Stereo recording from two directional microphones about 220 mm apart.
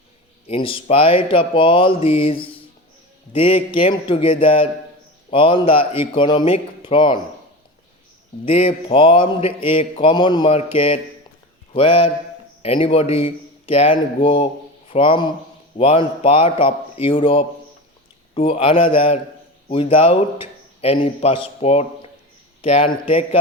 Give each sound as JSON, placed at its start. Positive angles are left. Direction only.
{"t": 0.4, "sound": "speech", "side_deg": 25}
{"t": 8.4, "sound": "a man's voice", "side_deg": 25}